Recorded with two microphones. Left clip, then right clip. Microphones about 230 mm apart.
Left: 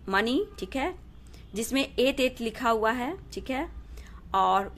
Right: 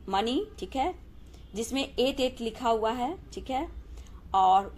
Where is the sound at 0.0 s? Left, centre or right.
Left.